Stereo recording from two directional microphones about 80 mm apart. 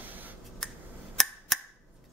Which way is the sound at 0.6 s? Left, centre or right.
Centre.